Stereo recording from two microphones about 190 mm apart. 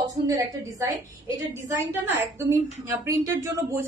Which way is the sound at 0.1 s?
20° right (ahead or behind).